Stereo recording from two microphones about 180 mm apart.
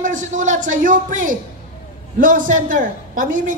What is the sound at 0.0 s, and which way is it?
A man's voice, 45° right (ahead or behind).